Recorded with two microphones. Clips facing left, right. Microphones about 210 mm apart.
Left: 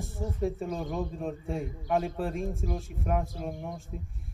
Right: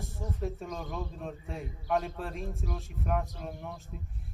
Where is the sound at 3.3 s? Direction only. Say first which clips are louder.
Left 4 dB; 45° left (ahead or behind).